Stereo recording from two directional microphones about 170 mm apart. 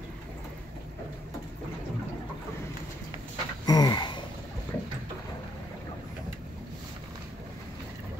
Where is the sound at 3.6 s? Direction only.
25° left (ahead or behind).